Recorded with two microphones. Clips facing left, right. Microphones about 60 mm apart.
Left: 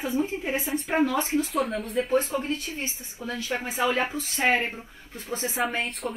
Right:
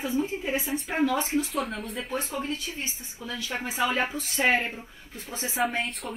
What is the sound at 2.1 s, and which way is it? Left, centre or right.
Speech, left.